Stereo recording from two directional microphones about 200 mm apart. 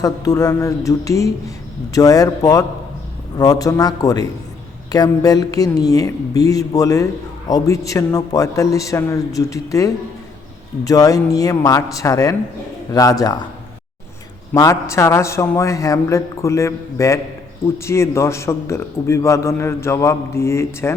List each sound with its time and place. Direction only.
0.0 s a man's voice: 15° left (ahead or behind)
14.5 s speech: 15° left (ahead or behind)